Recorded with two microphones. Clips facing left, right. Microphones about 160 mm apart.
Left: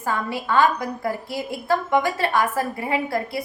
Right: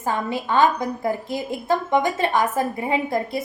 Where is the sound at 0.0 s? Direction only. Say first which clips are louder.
Right 1 dB; 20° right (ahead or behind).